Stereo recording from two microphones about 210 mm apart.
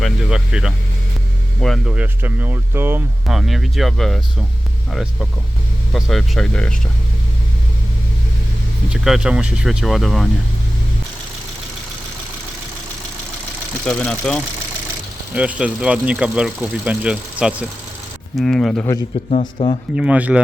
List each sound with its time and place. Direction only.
0.0 s speech: centre (ahead or behind)
8.9 s speech: 5° right (ahead or behind)
13.8 s speech: 5° left (ahead or behind)
19.3 s speech: 30° left (ahead or behind)
20.0 s speech: 5° right (ahead or behind)